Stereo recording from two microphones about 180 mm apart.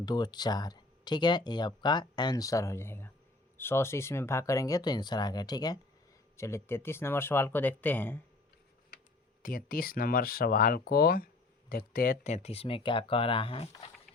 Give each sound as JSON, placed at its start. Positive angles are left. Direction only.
{"t": 0.0, "sound": "speech", "side_deg": 20}
{"t": 9.4, "sound": "speech", "side_deg": 50}